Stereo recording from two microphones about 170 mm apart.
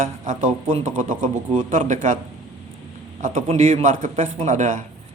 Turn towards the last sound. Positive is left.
turn(degrees=-45)  # may be behind; listen again after turning